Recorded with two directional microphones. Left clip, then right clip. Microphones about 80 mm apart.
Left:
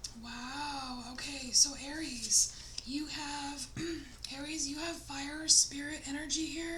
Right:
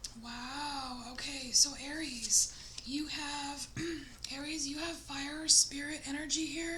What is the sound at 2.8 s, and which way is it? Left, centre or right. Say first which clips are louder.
Speech: right 1 dB; right.